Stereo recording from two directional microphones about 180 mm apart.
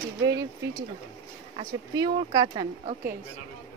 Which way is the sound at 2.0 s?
25° right (ahead or behind).